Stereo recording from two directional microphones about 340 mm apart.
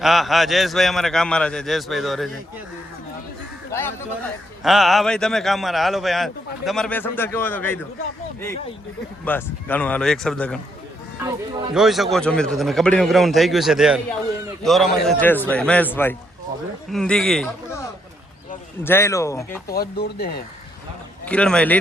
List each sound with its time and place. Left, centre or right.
0.0 s a man's voice: centre
3.7 s a man's voice: centre
9.2 s a man's voice: centre
19.6 s speech: left
21.2 s a man's voice: centre